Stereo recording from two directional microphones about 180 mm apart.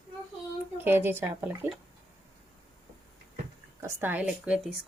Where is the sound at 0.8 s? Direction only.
10° right (ahead or behind).